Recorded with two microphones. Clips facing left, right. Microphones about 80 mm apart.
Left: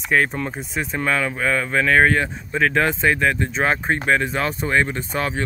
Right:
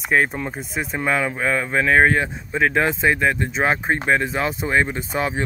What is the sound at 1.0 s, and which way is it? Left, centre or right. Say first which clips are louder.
Speech: right 1 dB; centre.